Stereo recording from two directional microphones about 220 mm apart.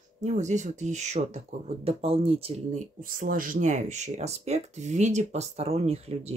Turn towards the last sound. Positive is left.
turn(degrees=-30)  # may be behind; listen again after turning